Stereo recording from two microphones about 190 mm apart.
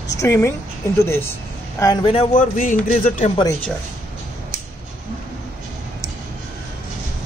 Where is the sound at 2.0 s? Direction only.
35° left (ahead or behind).